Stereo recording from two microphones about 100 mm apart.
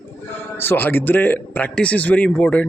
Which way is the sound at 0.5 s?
20° left (ahead or behind).